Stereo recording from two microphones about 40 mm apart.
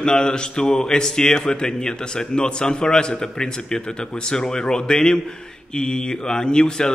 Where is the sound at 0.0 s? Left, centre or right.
Centre.